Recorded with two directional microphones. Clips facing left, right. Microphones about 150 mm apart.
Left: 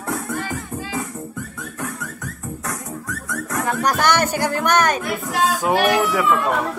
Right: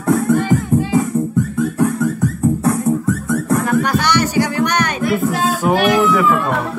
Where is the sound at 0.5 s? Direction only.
20° right (ahead or behind).